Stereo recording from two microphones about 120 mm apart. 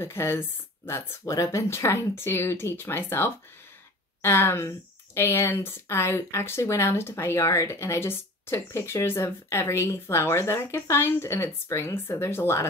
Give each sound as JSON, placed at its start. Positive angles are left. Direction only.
{"t": 0.0, "sound": "speech", "side_deg": 20}